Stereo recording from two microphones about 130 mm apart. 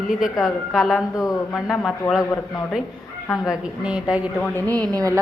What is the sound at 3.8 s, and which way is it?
Speech, 10° right (ahead or behind).